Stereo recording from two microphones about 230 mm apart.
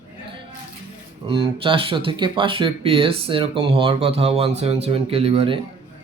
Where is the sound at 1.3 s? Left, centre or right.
Right.